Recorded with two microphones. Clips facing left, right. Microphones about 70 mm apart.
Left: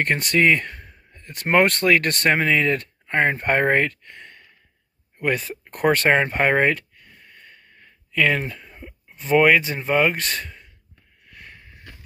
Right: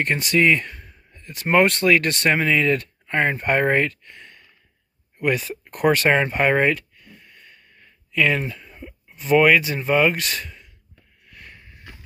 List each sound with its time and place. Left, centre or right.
0.0 s speech: left
5.2 s a sound: left
9.2 s speech: left